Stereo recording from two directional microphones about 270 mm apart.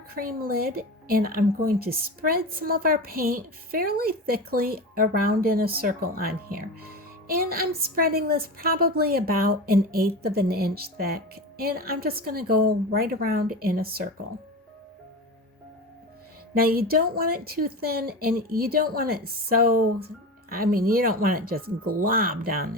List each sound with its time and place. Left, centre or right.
0.1 s a woman's voice: right
16.6 s a woman's voice: right